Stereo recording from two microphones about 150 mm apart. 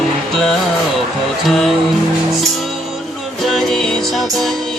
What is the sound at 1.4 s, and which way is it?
Music, centre (ahead or behind).